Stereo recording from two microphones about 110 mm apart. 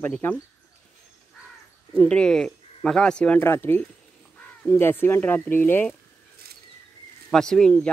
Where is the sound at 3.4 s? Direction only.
20° left (ahead or behind).